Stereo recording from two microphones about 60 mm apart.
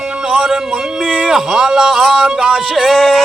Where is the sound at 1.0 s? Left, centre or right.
Centre.